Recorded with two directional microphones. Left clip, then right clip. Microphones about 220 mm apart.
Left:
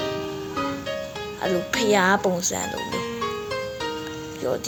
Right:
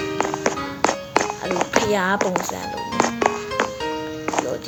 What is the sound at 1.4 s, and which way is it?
Speech, centre (ahead or behind).